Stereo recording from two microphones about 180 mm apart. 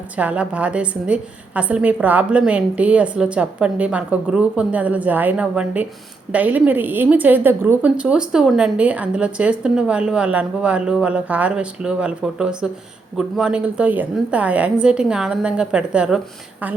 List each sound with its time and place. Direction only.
0.2 s a woman's voice: 5° right (ahead or behind)